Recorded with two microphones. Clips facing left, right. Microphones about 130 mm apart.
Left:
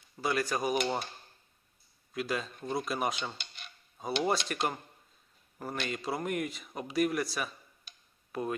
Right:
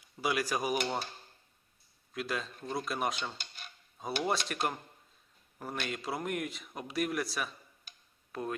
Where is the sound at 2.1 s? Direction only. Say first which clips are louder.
Left 2 dB; centre (ahead or behind).